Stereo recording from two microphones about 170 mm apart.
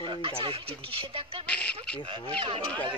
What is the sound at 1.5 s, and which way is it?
Speech, 5° left (ahead or behind).